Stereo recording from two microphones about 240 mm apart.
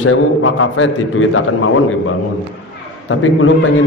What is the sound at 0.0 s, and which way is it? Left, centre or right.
A man's voice, left.